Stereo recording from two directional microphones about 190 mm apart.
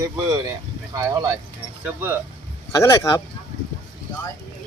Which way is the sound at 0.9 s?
20° right (ahead or behind).